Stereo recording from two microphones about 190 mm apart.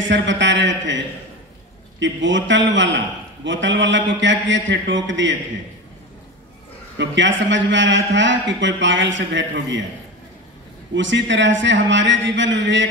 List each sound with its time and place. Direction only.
0.0 s a man's voice: 70° right (ahead or behind)
7.0 s a man's voice: 75° right (ahead or behind)
11.0 s a man's voice: 70° right (ahead or behind)